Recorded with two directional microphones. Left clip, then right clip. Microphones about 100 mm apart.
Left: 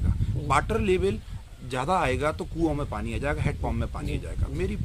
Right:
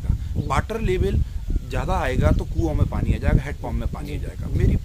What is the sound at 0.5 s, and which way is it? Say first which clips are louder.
Speech: left 1 dB; 30° left (ahead or behind).